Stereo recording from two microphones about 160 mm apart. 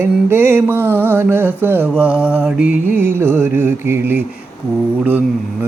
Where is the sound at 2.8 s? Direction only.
10° right (ahead or behind).